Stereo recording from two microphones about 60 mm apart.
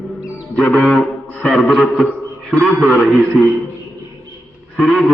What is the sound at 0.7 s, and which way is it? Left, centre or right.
Music, centre.